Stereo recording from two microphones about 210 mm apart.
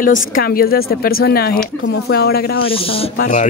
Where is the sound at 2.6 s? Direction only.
25° left (ahead or behind).